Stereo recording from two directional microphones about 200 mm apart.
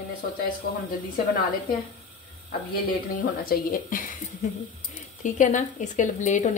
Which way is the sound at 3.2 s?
45° left (ahead or behind).